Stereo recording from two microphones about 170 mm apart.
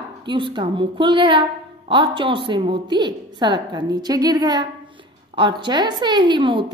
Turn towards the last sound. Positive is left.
turn(degrees=-30)  # may be behind; listen again after turning